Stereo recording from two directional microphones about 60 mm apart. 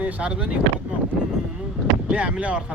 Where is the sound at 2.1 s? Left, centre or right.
Centre.